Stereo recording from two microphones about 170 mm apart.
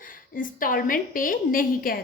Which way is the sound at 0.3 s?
55° left (ahead or behind).